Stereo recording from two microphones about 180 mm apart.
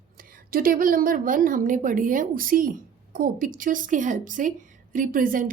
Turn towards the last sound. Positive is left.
turn(degrees=-50)  # may be behind; listen again after turning